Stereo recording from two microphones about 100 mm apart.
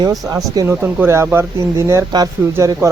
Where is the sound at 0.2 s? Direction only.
25° right (ahead or behind).